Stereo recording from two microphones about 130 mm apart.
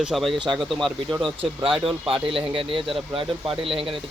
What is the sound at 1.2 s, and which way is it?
Speech, 45° right (ahead or behind).